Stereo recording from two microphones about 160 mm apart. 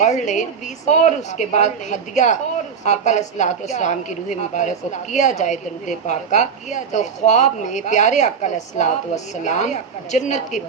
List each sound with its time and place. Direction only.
0.0 s a woman's voice: 50° left (ahead or behind)